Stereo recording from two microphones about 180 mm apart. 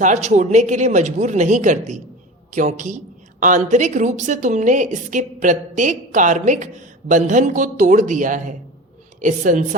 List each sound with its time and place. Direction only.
0.0 s a woman's voice: 40° right (ahead or behind)